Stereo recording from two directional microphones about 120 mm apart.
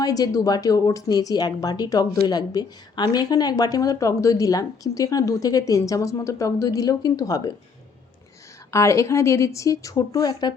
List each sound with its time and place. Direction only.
0.0 s speech: 30° left (ahead or behind)
8.7 s speech: 25° left (ahead or behind)